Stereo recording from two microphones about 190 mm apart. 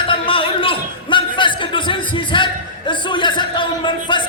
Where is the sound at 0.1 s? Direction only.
30° left (ahead or behind).